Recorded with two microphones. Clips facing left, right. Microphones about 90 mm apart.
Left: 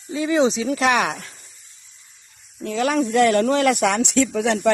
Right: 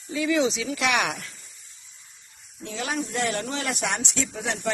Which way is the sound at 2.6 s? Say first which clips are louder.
Left 9 dB; 55° left (ahead or behind).